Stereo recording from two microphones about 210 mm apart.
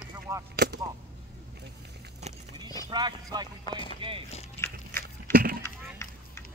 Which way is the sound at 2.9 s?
20° right (ahead or behind).